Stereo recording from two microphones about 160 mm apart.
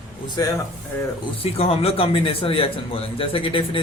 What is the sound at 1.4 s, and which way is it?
A man's voice, 40° left (ahead or behind).